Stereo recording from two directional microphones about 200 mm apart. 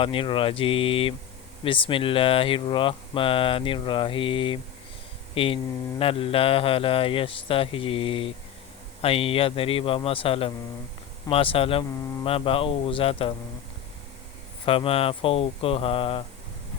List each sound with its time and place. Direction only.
0.0 s speech: 25° left (ahead or behind)
14.6 s speech: 25° left (ahead or behind)